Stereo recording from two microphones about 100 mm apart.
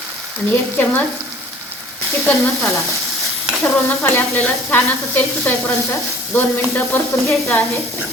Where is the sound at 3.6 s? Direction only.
20° left (ahead or behind).